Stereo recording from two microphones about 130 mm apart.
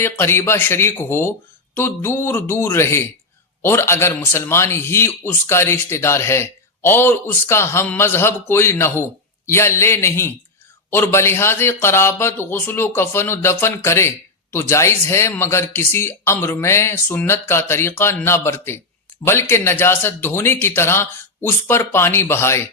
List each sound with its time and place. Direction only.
0.0 s a man's voice: 20° left (ahead or behind)